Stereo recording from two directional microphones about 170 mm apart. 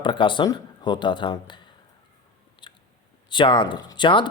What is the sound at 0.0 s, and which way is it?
Speech, 30° left (ahead or behind).